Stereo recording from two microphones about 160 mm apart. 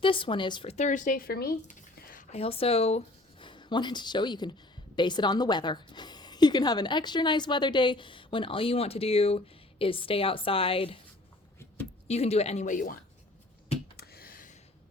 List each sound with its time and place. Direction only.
0.0 s speech: 35° left (ahead or behind)
0.7 s speech: 45° left (ahead or behind); by 1.5 s 75° left (ahead or behind)
2.0 s a sound: 60° left (ahead or behind)
2.3 s speech: 35° left (ahead or behind)
3.4 s a woman's voice: 30° left (ahead or behind)
12.0 s speech: 40° left (ahead or behind); by 13.0 s 60° left (ahead or behind)
13.9 s finger snapping: 75° left (ahead or behind)